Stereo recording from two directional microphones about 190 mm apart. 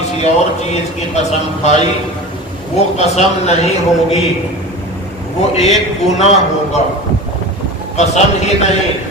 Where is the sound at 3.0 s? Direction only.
35° left (ahead or behind).